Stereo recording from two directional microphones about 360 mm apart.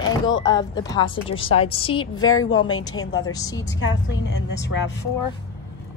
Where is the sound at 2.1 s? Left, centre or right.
Left.